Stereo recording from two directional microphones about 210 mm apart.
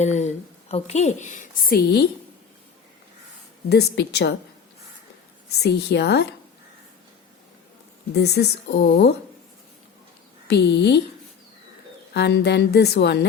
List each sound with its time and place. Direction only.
0.0 s a woman's voice: 35° left (ahead or behind)
3.7 s a woman's voice: 50° left (ahead or behind)
5.5 s a woman's voice: 50° left (ahead or behind)
8.1 s a woman's voice: 50° left (ahead or behind)
10.5 s a woman's voice: 55° left (ahead or behind)
12.1 s a woman's voice: 50° left (ahead or behind)